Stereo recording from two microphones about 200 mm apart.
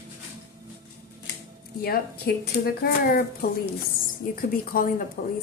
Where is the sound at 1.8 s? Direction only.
50° left (ahead or behind).